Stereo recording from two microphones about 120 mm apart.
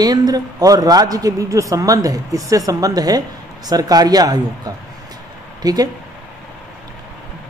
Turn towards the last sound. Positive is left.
turn(degrees=-35)  # may be behind; listen again after turning